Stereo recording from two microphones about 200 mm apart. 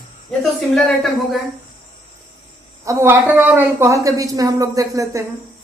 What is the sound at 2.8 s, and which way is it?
A woman's voice, 15° right (ahead or behind).